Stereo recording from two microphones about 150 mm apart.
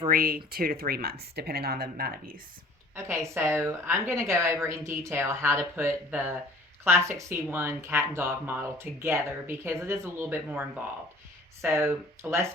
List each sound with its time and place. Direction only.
0.1 s speech: 75° right (ahead or behind)
2.9 s speech: 15° right (ahead or behind)